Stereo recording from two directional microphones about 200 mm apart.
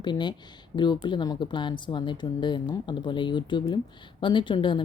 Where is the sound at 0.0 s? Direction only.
20° left (ahead or behind).